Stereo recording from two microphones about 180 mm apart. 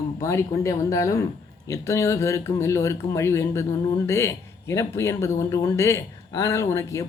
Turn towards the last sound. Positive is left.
turn(degrees=15)  # may be behind; listen again after turning